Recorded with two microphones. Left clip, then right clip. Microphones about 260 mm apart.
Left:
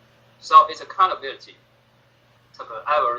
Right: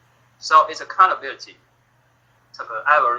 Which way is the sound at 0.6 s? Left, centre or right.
Centre.